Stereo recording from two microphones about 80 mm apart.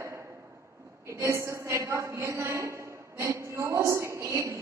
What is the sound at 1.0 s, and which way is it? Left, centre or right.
A woman's voice, right.